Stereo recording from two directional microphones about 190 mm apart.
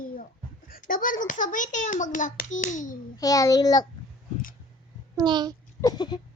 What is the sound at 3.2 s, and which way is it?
Speech, 20° left (ahead or behind).